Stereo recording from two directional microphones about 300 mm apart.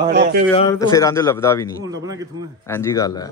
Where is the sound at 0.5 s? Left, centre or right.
Centre.